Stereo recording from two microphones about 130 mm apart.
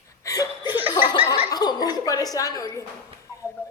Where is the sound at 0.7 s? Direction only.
15° right (ahead or behind).